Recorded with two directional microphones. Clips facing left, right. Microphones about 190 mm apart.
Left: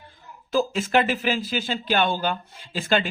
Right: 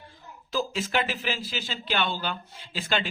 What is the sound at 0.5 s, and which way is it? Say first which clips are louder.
A man's voice: left 6 dB; 50° left (ahead or behind).